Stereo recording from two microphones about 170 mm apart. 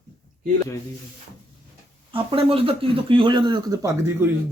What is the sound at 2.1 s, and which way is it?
Speech, 30° right (ahead or behind).